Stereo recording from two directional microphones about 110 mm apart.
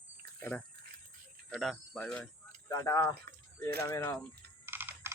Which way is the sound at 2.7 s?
30° left (ahead or behind).